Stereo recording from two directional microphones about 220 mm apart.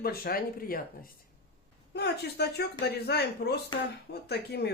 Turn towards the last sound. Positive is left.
turn(degrees=50)  # may be behind; listen again after turning